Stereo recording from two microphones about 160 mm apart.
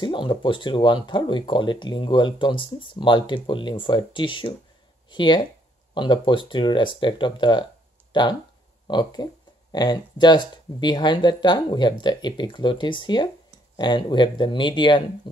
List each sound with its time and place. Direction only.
0.0 s speech: 30° left (ahead or behind)